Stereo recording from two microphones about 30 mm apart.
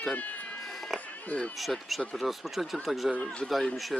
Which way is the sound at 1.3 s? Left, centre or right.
Left.